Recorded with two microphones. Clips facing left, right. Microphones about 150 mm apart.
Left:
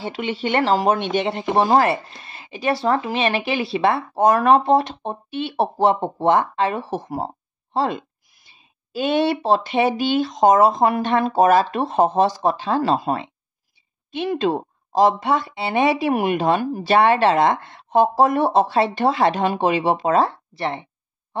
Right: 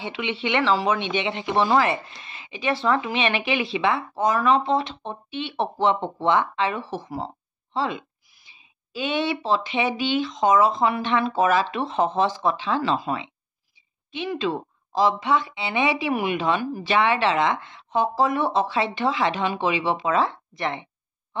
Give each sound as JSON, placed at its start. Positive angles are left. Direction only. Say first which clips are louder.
{"t": 0.0, "sound": "speech", "louder": "left 3 dB", "side_deg": 40}